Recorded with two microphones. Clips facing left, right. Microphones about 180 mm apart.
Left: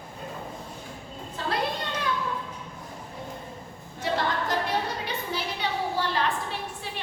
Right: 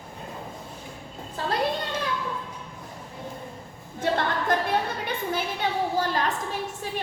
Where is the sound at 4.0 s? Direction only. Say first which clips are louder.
Right 2 dB; 55° right (ahead or behind).